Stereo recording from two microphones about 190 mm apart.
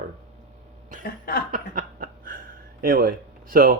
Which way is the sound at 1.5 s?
45° right (ahead or behind).